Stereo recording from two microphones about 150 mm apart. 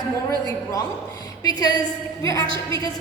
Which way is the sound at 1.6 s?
25° left (ahead or behind).